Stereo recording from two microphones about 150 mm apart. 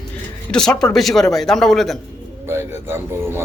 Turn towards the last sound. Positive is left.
turn(degrees=-15)  # may be behind; listen again after turning